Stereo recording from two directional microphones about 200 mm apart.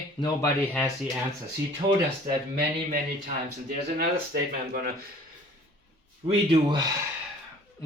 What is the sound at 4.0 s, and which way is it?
Speech, 50° right (ahead or behind).